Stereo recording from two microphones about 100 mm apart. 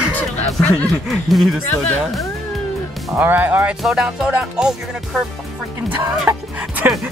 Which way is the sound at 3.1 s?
20° right (ahead or behind).